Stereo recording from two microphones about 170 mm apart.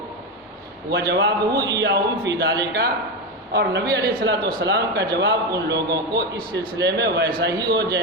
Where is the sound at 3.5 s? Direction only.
75° right (ahead or behind).